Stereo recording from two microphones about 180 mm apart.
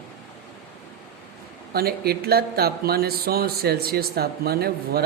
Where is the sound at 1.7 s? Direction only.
60° right (ahead or behind).